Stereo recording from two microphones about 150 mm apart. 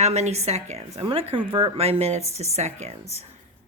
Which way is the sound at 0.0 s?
50° right (ahead or behind).